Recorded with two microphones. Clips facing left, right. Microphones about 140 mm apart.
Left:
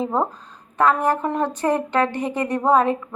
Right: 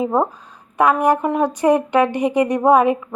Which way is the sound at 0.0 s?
10° right (ahead or behind).